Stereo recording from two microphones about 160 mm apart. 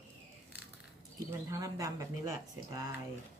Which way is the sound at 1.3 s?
20° right (ahead or behind).